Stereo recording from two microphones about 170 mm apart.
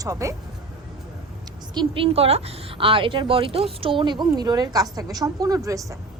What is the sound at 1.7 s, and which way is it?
A woman's voice, 30° right (ahead or behind).